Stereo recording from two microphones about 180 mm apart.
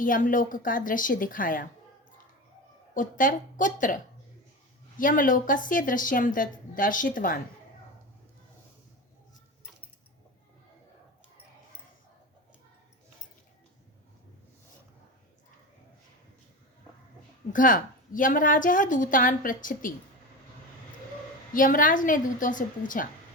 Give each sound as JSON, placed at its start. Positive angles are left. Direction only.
{"t": 0.0, "sound": "a woman's voice", "side_deg": 50}
{"t": 2.9, "sound": "a woman's voice", "side_deg": 50}
{"t": 17.5, "sound": "a woman's voice", "side_deg": 50}
{"t": 21.5, "sound": "a woman's voice", "side_deg": 50}